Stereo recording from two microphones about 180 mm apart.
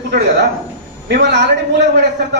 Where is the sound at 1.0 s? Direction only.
65° right (ahead or behind).